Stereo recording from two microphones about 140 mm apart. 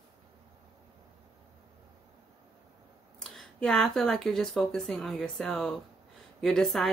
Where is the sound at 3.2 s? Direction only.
5° left (ahead or behind).